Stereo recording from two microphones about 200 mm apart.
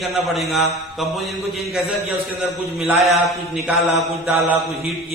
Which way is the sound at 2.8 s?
Centre (ahead or behind).